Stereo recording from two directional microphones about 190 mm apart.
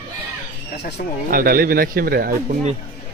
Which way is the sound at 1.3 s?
50° right (ahead or behind).